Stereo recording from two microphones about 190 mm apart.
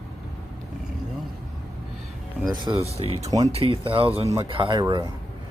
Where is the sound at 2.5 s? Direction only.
25° right (ahead or behind).